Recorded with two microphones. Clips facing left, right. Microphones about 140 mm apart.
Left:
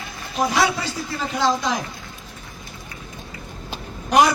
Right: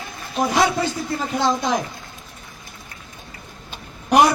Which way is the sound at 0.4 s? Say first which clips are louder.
Right 2 dB; 50° right (ahead or behind).